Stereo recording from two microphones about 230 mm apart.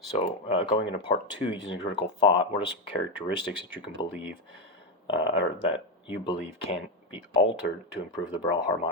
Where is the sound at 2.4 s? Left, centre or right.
Left.